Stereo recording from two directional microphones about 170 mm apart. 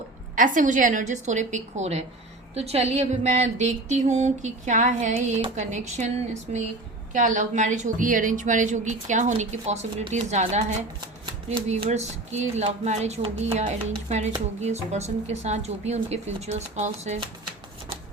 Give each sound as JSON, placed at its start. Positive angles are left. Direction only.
{"t": 0.3, "sound": "speech", "side_deg": -50}
{"t": 7.1, "sound": "a woman's voice", "side_deg": -45}